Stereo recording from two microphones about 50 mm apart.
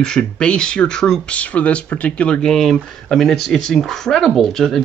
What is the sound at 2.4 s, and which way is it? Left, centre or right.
Speech, centre.